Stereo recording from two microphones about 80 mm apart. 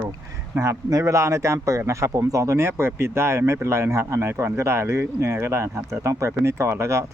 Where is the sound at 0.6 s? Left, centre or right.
Right.